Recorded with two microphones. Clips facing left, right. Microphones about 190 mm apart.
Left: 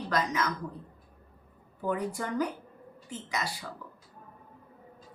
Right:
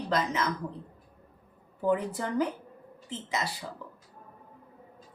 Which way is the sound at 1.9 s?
25° right (ahead or behind).